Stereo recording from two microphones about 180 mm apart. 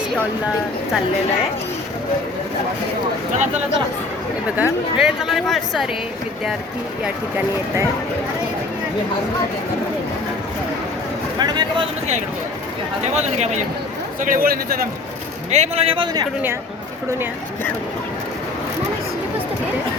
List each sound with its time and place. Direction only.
4.5 s a woman's voice: 5° right (ahead or behind)
11.3 s speech: 25° right (ahead or behind)
13.1 s a man's voice: 40° right (ahead or behind)
14.2 s a man's voice: 50° right (ahead or behind)
15.4 s a man's voice: 40° right (ahead or behind)